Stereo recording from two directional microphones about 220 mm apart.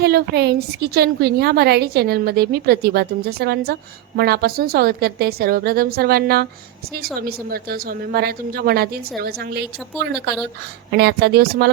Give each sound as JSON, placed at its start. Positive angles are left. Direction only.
{"t": 0.0, "sound": "a woman's voice", "side_deg": -45}